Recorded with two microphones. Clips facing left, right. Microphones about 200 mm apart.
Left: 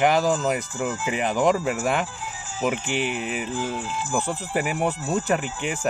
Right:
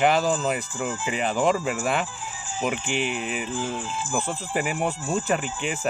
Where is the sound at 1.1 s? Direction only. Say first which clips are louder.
Left 1 dB; 15° left (ahead or behind).